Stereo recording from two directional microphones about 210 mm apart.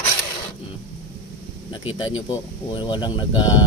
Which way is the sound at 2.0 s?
25° left (ahead or behind).